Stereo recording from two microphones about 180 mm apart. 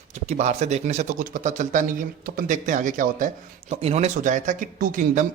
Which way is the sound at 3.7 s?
35° right (ahead or behind).